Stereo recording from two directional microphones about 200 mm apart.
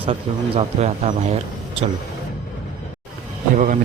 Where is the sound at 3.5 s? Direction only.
40° right (ahead or behind).